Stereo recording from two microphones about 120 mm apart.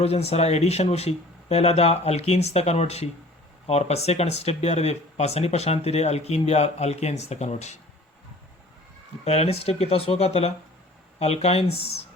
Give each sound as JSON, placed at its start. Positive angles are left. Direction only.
{"t": 0.0, "sound": "speech", "side_deg": 60}
{"t": 9.2, "sound": "speech", "side_deg": 60}